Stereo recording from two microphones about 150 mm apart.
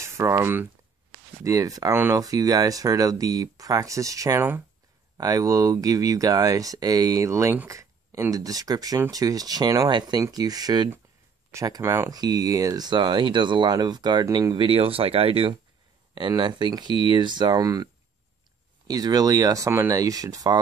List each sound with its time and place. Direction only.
0.0 s speech: 20° right (ahead or behind)
18.9 s speech: 25° right (ahead or behind)